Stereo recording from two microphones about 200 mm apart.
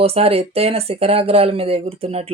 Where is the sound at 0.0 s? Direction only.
30° right (ahead or behind).